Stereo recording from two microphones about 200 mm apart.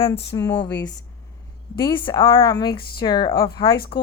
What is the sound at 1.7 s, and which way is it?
A woman's voice, 25° left (ahead or behind).